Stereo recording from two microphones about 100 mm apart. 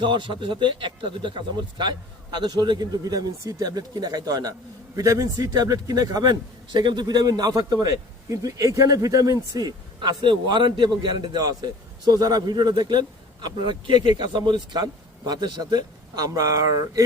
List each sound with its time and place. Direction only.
0.0 s a man's voice: 55° right (ahead or behind); by 17.0 s 35° right (ahead or behind)